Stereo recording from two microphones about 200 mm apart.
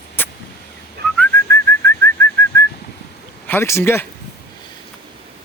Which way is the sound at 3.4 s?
10° left (ahead or behind).